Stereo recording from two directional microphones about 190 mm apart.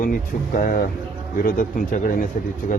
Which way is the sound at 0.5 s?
50° left (ahead or behind).